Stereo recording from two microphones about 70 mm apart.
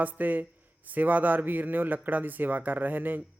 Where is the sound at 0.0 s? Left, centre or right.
Right.